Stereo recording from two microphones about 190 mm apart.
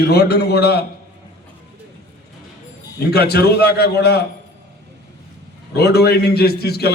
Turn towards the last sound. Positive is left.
turn(degrees=55)  # may be behind; listen again after turning